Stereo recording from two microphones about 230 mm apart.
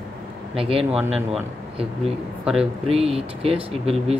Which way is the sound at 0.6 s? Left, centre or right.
Right.